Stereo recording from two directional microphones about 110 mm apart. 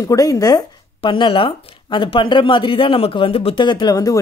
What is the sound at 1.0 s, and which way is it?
Speech, 50° left (ahead or behind).